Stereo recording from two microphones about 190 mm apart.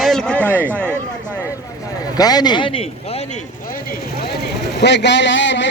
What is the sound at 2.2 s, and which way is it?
Speech, 20° left (ahead or behind).